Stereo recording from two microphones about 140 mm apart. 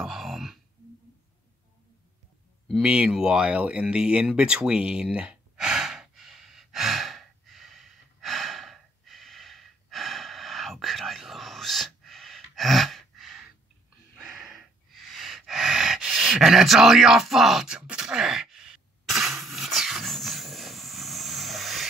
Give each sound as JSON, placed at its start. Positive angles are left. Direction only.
{"t": 0.0, "sound": "sigh", "side_deg": 0}
{"t": 2.7, "sound": "a sound", "side_deg": -5}
{"t": 14.3, "sound": "gasp", "side_deg": -5}